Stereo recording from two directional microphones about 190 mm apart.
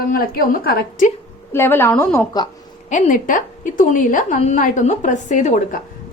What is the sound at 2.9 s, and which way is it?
A woman's voice, 45° left (ahead or behind).